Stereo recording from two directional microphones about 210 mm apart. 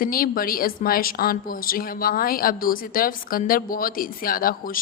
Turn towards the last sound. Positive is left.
turn(degrees=40)  # may be behind; listen again after turning